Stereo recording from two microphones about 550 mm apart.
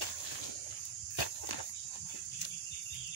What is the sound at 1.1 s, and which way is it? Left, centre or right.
Walk, left.